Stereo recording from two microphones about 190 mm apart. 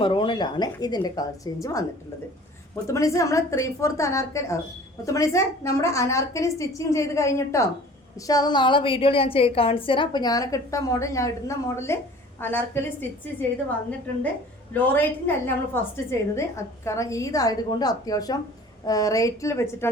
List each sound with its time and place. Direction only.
0.0 s a woman's voice: 25° left (ahead or behind)
2.8 s a woman's voice: 15° left (ahead or behind)
14.7 s a woman's voice: 10° left (ahead or behind)